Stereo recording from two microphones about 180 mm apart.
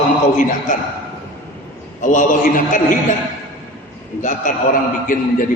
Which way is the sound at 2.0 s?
45° left (ahead or behind).